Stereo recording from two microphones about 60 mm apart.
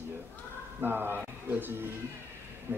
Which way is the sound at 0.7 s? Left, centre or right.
Right.